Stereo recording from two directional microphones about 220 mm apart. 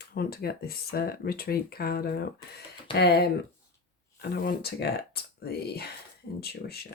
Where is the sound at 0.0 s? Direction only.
45° left (ahead or behind).